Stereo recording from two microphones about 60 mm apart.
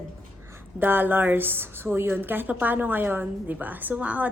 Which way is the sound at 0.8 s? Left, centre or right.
Right.